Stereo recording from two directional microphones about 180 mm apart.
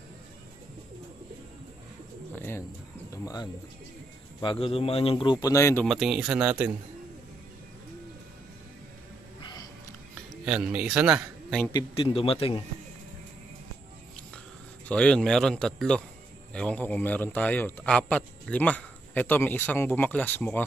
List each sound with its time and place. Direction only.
2.3 s bird: 15° left (ahead or behind)
4.4 s speech: 30° left (ahead or behind)
5.9 s speech: 5° right (ahead or behind)
9.4 s music: 25° left (ahead or behind)
10.1 s speech: 5° right (ahead or behind)
11.7 s speech: 30° left (ahead or behind)
14.9 s a man's voice: 5° left (ahead or behind)